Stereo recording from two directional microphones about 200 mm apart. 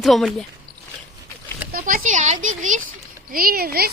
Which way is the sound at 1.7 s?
40° right (ahead or behind).